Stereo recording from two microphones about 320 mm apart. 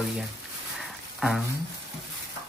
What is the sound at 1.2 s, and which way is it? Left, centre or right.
Speech, centre.